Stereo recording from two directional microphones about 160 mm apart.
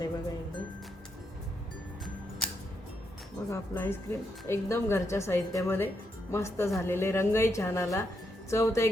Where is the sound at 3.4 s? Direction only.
15° left (ahead or behind).